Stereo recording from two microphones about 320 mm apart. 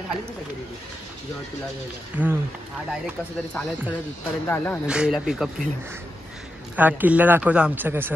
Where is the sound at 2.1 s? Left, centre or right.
Centre.